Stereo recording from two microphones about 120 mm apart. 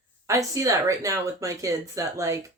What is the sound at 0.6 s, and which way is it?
Speech, 25° right (ahead or behind).